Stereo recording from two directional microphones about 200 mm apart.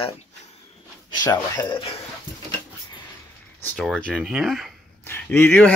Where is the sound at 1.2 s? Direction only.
20° left (ahead or behind).